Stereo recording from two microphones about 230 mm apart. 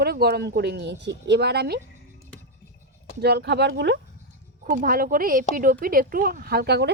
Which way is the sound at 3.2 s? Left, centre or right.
Right.